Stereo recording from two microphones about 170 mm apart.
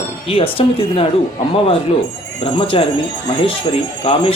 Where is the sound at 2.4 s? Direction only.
35° left (ahead or behind).